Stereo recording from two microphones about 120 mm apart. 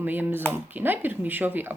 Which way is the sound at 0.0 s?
15° right (ahead or behind).